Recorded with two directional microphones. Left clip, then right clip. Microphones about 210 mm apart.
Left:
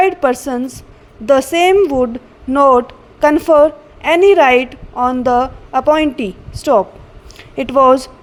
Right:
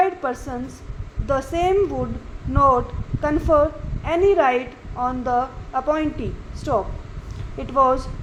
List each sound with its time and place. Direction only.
0.0 s a woman's voice: 40° left (ahead or behind)